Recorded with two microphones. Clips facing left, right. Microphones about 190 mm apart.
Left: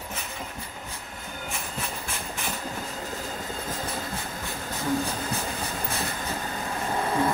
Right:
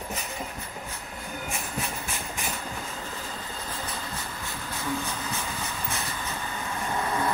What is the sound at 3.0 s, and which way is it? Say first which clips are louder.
Train: left 3 dB; 40° left (ahead or behind).